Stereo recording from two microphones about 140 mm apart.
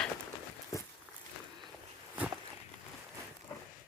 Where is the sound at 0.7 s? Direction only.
25° left (ahead or behind).